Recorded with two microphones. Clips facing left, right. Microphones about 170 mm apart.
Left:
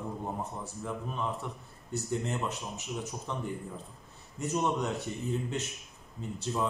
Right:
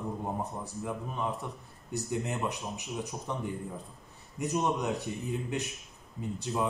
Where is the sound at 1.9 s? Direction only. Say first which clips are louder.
Even; 15° right (ahead or behind).